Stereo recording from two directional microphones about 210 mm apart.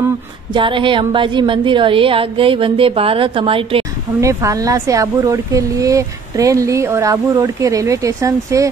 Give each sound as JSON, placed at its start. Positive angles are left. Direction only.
{"t": 0.5, "sound": "a woman's voice", "side_deg": -25}
{"t": 4.2, "sound": "speech", "side_deg": -15}